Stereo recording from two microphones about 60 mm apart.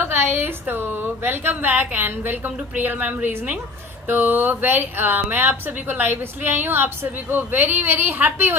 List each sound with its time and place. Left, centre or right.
0.0 s speech: right